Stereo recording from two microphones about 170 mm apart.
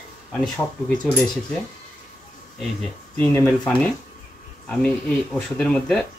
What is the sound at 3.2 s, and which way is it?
Speech, 5° left (ahead or behind).